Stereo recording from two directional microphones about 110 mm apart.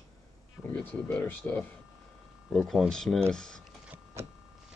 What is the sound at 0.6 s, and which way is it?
Speech, 10° left (ahead or behind).